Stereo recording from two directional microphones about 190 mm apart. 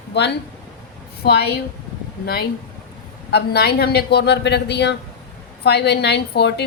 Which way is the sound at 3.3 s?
60° left (ahead or behind).